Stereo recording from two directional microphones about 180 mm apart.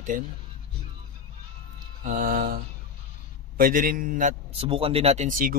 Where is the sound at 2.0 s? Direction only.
50° right (ahead or behind).